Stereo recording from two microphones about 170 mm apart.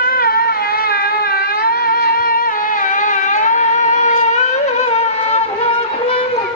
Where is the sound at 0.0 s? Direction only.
60° left (ahead or behind).